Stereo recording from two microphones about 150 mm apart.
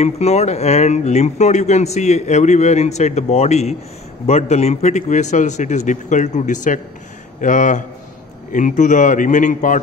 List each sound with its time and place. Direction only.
0.0 s a man's voice: 45° left (ahead or behind)